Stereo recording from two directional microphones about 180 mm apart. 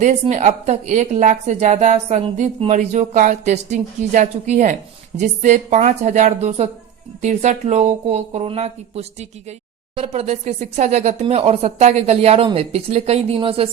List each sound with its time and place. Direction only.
0.0 s a woman's voice: 40° right (ahead or behind)